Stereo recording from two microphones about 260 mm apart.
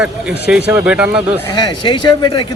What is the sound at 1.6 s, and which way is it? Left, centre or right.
Speech, centre.